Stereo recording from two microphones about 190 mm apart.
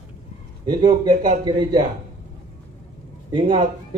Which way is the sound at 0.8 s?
20° right (ahead or behind).